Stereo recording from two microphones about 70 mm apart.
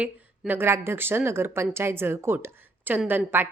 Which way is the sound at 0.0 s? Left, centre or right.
Right.